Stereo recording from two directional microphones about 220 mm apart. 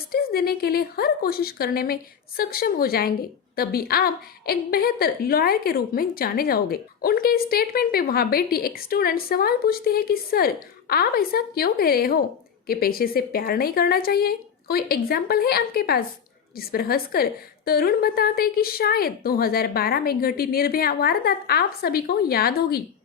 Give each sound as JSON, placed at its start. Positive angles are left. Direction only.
{"t": 0.1, "sound": "a woman's voice", "side_deg": 45}